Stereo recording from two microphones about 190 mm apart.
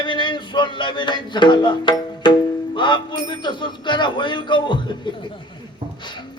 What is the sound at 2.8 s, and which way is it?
Speech, 25° left (ahead or behind).